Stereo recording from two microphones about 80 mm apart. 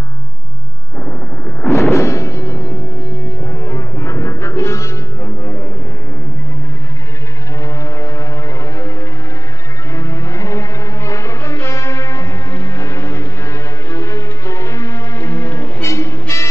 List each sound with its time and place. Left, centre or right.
1.7 s music: left
7.6 s vehicle: left
9.9 s music: left
15.8 s music: left